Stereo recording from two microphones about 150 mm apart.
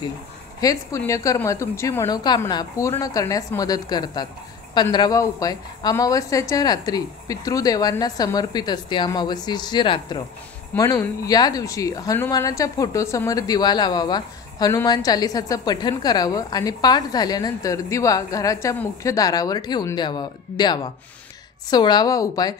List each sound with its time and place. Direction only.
0.6 s speech: 20° left (ahead or behind)
10.8 s speech: 20° left (ahead or behind)